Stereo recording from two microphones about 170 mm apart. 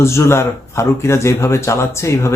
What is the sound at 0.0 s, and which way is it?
Speech, 15° left (ahead or behind).